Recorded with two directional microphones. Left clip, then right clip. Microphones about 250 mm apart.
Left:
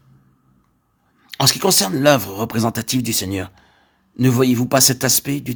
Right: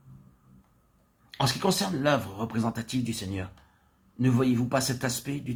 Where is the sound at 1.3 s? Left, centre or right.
Left.